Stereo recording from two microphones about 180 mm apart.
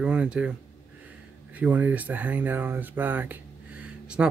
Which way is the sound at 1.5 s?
10° right (ahead or behind).